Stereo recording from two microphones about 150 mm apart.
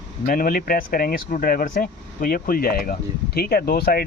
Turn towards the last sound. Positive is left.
turn(degrees=90)